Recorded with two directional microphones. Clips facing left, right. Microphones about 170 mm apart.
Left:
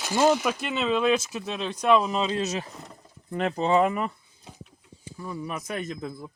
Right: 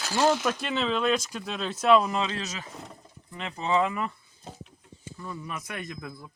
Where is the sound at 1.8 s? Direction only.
15° left (ahead or behind).